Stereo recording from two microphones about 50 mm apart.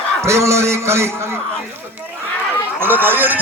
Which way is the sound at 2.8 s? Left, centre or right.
Right.